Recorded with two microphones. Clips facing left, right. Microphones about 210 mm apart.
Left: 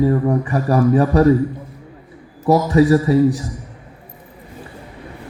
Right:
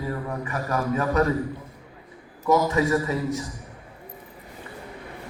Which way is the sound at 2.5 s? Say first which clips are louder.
Left 8 dB; 35° left (ahead or behind).